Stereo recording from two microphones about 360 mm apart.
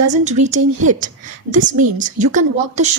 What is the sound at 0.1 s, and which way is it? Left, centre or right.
A woman's voice, centre.